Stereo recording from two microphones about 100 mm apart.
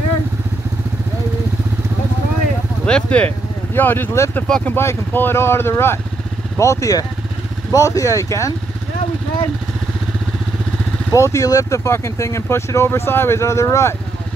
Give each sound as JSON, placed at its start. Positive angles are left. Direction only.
{"t": 2.8, "sound": "speech", "side_deg": 10}
{"t": 4.5, "sound": "speech", "side_deg": 5}
{"t": 4.7, "sound": "speech", "side_deg": 20}
{"t": 11.1, "sound": "speech", "side_deg": 30}